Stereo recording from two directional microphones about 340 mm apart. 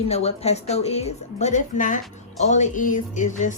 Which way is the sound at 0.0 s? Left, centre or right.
Centre.